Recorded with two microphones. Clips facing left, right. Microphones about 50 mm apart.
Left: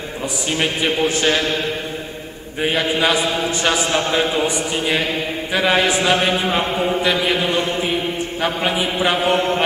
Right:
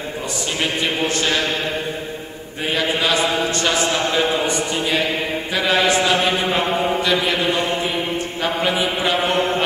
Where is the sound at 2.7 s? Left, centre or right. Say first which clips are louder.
Even; centre.